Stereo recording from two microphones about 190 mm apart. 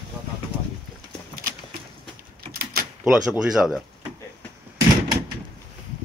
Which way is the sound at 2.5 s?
50° right (ahead or behind).